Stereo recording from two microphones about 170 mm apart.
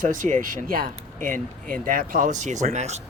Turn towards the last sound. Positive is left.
turn(degrees=-40)  # may be behind; listen again after turning